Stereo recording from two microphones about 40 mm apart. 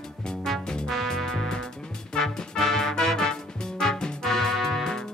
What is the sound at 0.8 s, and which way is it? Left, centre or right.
Music, centre.